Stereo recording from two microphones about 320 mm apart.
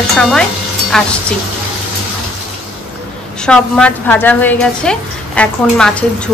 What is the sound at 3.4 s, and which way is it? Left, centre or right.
A woman's voice, centre.